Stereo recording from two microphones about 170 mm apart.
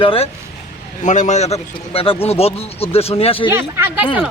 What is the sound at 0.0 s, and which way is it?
Speech, 35° left (ahead or behind).